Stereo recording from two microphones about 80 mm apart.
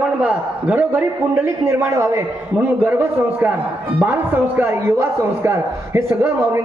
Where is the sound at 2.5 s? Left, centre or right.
Centre.